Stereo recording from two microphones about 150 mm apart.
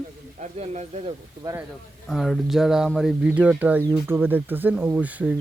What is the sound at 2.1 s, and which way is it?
Speech, centre (ahead or behind).